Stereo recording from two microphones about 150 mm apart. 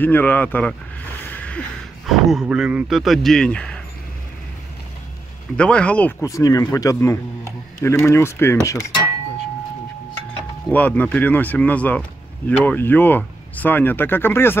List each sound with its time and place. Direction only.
0.0 s speech: 10° left (ahead or behind)
1.2 s a sound: 10° left (ahead or behind)
2.0 s speech: centre (ahead or behind)
5.6 s speech: 5° left (ahead or behind)
6.2 s speech: 25° left (ahead or behind)
10.7 s speech: 10° left (ahead or behind)